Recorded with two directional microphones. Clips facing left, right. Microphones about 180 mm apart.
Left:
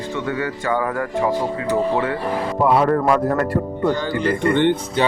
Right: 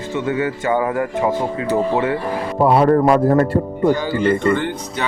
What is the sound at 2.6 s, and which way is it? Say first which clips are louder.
Speech: right 4 dB; 30° right (ahead or behind).